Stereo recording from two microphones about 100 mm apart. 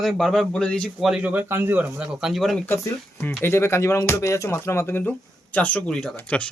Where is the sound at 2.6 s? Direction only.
25° left (ahead or behind).